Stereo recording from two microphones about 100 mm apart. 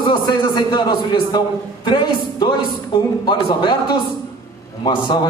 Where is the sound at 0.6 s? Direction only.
50° left (ahead or behind).